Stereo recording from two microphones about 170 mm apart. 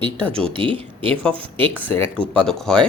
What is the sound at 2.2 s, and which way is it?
Speech, 5° left (ahead or behind).